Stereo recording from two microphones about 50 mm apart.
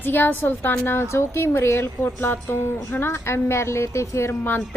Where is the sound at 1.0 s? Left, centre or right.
Left.